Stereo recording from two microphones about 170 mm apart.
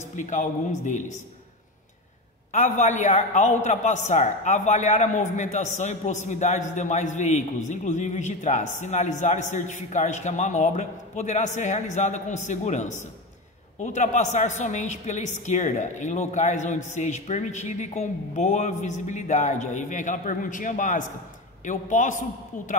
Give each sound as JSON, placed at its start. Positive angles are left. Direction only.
{"t": 0.1, "sound": "a woman's voice", "side_deg": 50}
{"t": 2.5, "sound": "a woman's voice", "side_deg": 45}